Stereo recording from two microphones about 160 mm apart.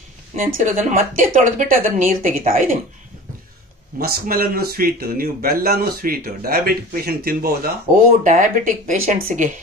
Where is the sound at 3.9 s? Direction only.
70° right (ahead or behind).